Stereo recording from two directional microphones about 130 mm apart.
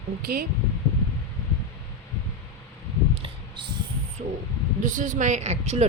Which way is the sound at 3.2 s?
40° right (ahead or behind).